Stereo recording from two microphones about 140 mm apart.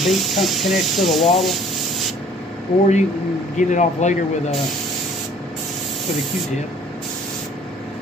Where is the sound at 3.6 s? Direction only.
60° left (ahead or behind).